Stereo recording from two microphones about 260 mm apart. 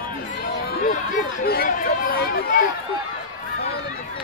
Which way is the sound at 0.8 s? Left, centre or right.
Left.